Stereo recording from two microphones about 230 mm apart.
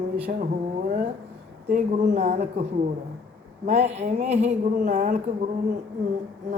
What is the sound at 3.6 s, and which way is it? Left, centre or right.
Speech, right.